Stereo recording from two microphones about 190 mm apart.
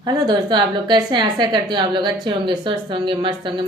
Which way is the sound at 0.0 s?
20° right (ahead or behind).